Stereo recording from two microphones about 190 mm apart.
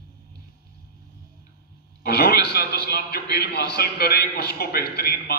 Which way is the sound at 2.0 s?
55° left (ahead or behind).